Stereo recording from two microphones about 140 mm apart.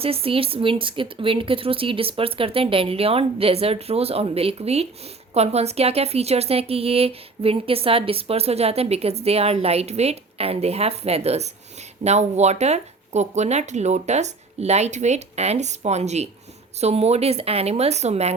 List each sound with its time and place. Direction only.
0.0 s a woman's voice: 45° right (ahead or behind)